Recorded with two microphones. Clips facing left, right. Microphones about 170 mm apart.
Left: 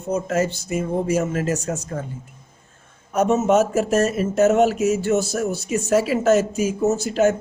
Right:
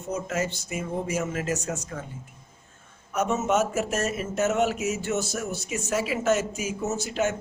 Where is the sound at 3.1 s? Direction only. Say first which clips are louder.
Left 7 dB; 35° left (ahead or behind).